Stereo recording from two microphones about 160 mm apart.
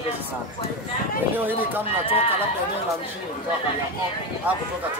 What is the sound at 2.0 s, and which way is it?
Speech, 35° left (ahead or behind).